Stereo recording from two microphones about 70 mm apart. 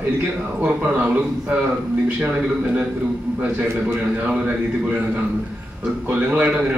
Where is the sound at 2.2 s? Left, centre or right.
Right.